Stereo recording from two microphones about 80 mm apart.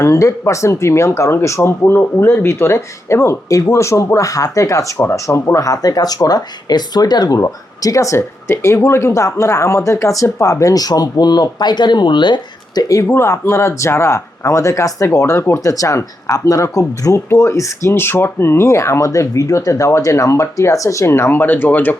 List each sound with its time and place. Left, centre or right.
0.0 s speech: left
7.3 s speech: left
13.1 s speech: left